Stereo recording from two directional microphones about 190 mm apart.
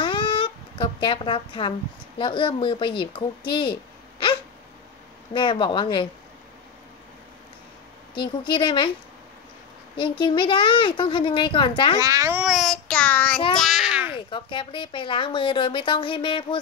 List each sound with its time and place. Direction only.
0.0 s a sound: 25° left (ahead or behind)
2.1 s a woman's voice: 25° left (ahead or behind)
5.3 s a woman's voice: 25° left (ahead or behind)
8.1 s a woman's voice: 25° left (ahead or behind)
9.9 s a woman's voice: 25° left (ahead or behind)
12.0 s a child's voice: 15° right (ahead or behind)
14.1 s a woman's voice: 25° left (ahead or behind)